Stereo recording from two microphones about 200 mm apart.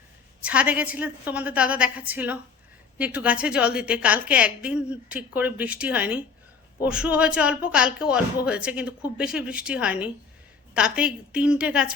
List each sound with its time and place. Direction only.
0.4 s a woman's voice: 5° right (ahead or behind)